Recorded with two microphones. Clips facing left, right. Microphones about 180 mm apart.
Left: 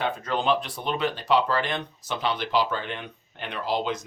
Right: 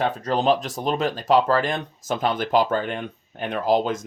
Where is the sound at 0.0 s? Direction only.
40° right (ahead or behind).